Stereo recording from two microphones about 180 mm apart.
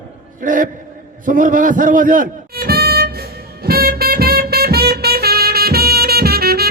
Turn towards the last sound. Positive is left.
turn(degrees=-60)  # may be behind; listen again after turning